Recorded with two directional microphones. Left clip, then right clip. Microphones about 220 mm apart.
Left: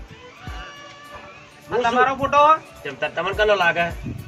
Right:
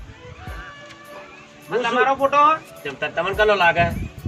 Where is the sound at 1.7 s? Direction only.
10° left (ahead or behind).